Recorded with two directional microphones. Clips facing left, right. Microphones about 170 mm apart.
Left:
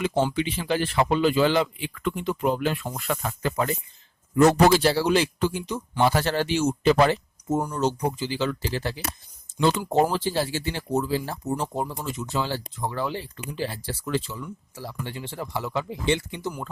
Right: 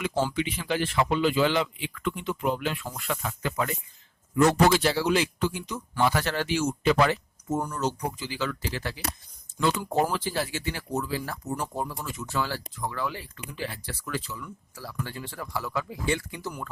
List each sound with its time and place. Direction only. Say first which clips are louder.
0.3 s speech: left 3 dB; 30° left (ahead or behind)